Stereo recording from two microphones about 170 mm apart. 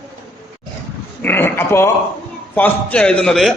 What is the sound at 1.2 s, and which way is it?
A man's voice, 10° left (ahead or behind).